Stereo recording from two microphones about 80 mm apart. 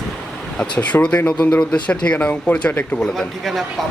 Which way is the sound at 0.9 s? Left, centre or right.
Centre.